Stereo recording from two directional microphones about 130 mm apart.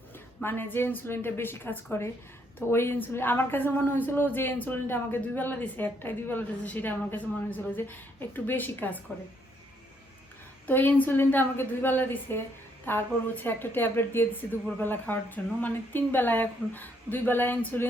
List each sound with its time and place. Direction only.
0.4 s a woman's voice: 15° left (ahead or behind)
10.7 s a woman's voice: 15° left (ahead or behind)